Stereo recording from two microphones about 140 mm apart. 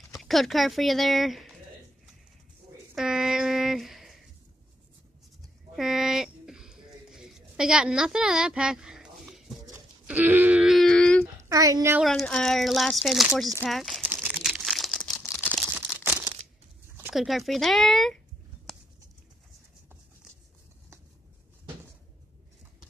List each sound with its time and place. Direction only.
0.1 s speech: centre (ahead or behind)
3.0 s a sound: 5° right (ahead or behind)
5.8 s a sound: centre (ahead or behind)
10.0 s wail: 10° right (ahead or behind); by 11.2 s 5° left (ahead or behind)
11.4 s speech: 25° right (ahead or behind)
12.0 s speech: centre (ahead or behind)
14.1 s crumpling: centre (ahead or behind)
17.1 s speech: centre (ahead or behind)